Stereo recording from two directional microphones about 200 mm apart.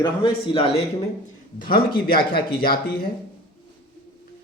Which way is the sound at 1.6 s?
45° left (ahead or behind).